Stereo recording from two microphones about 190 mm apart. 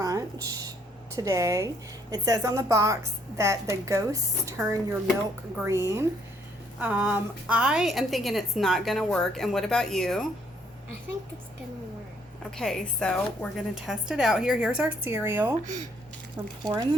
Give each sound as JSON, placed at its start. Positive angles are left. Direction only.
{"t": 0.0, "sound": "a sound", "side_deg": -20}
{"t": 1.1, "sound": "a woman's voice", "side_deg": -15}
{"t": 5.6, "sound": "a woman's voice", "side_deg": -15}
{"t": 12.5, "sound": "a woman's voice", "side_deg": 5}
{"t": 16.6, "sound": "speech", "side_deg": -20}